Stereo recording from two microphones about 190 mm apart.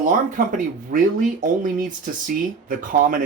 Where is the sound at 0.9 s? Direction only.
45° right (ahead or behind).